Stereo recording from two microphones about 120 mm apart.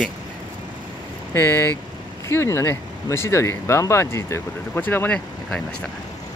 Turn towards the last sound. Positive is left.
turn(degrees=15)  # may be behind; listen again after turning